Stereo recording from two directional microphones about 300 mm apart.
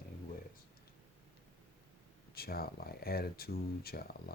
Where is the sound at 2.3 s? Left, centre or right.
Left.